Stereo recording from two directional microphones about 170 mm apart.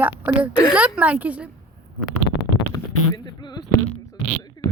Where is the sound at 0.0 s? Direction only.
10° right (ahead or behind).